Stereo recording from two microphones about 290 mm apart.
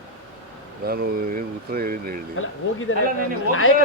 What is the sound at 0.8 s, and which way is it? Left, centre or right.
Speech, right.